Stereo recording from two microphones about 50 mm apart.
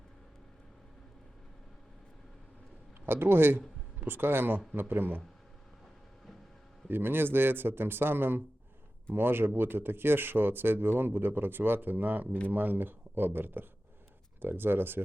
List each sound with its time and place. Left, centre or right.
3.1 s speech: right
6.8 s speech: right